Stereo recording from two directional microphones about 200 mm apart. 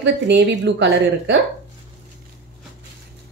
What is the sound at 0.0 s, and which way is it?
A woman's voice, 60° right (ahead or behind).